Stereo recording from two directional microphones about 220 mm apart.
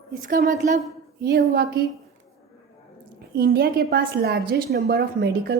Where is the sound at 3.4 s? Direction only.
45° right (ahead or behind).